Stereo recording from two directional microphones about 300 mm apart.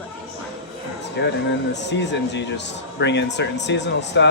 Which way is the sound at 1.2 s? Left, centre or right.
Left.